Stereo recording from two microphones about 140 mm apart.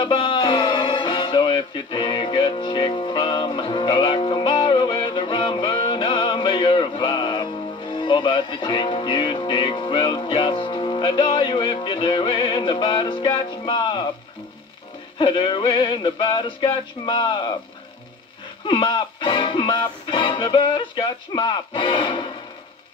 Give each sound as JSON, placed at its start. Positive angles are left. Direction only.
{"t": 0.0, "sound": "music", "side_deg": 35}
{"t": 15.1, "sound": "music", "side_deg": 35}
{"t": 18.7, "sound": "music", "side_deg": 35}